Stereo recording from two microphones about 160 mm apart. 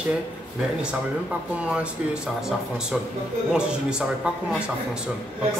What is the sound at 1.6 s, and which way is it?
A man's voice, 5° right (ahead or behind).